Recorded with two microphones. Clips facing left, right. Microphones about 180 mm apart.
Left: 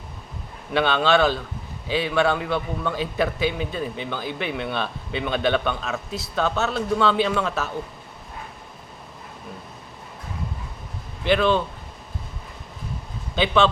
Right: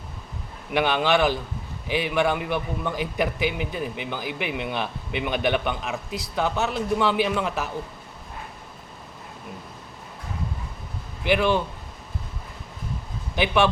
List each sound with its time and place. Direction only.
0.7 s a man's voice: 15° right (ahead or behind)
11.2 s speech: 15° right (ahead or behind)
13.3 s a man's voice: 15° right (ahead or behind)